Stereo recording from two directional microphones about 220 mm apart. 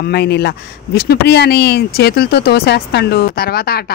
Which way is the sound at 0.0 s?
50° left (ahead or behind).